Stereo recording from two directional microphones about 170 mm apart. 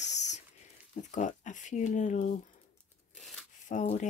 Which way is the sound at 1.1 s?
45° left (ahead or behind).